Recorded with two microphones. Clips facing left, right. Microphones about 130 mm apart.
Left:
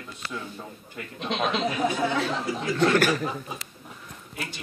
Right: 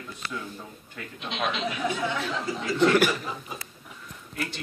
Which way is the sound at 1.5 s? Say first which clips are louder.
Left 4 dB; 40° left (ahead or behind).